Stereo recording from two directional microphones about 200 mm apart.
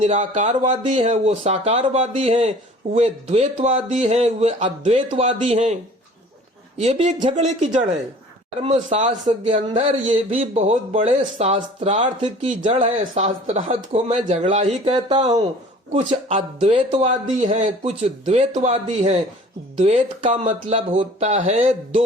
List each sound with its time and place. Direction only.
0.0 s speech: 35° right (ahead or behind)
6.7 s speech: 35° right (ahead or behind)